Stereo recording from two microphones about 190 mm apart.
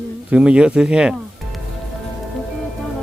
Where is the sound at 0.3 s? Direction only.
5° right (ahead or behind).